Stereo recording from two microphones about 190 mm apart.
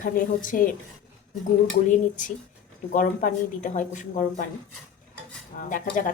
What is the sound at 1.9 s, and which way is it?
A woman's voice, 45° left (ahead or behind).